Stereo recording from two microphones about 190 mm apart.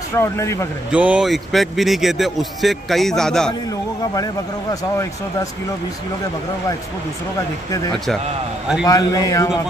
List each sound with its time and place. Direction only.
0.1 s speech: 15° left (ahead or behind)
0.9 s speech: 5° right (ahead or behind)
4.1 s speech: 20° left (ahead or behind)
8.8 s speech: 20° left (ahead or behind)